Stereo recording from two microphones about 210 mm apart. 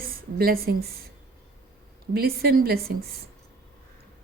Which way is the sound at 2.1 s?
50° right (ahead or behind).